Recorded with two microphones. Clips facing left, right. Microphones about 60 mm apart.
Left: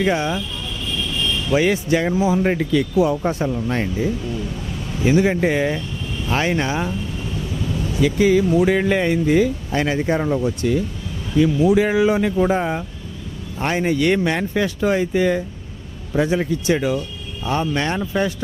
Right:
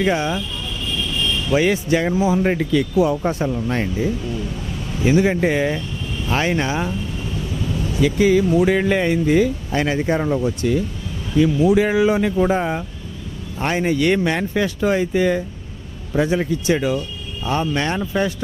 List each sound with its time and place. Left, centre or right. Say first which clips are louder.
0.0 s speech: even; right